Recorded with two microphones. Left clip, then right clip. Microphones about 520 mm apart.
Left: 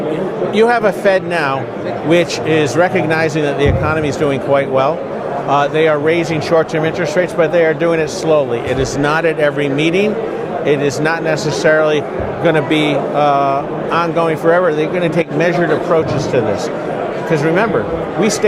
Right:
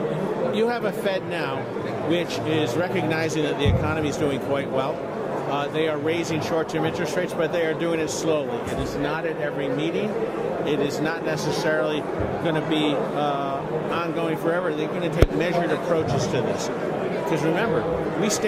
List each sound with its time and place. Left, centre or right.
0.5 s speech: left